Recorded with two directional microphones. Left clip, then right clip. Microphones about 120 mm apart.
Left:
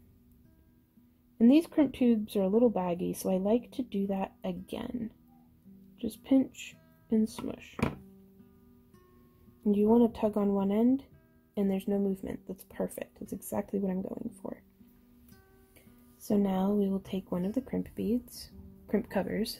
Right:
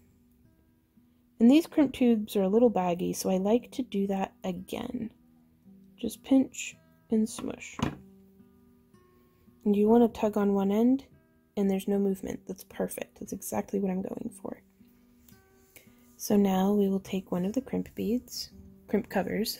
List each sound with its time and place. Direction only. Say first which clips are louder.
1.4 s speech: right 2 dB; 25° right (ahead or behind)
9.6 s speech: right 3 dB; 25° right (ahead or behind)
16.3 s speech: right 4 dB; 35° right (ahead or behind)